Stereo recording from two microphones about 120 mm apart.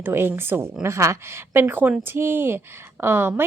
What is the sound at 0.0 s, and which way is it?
Speech, 20° right (ahead or behind).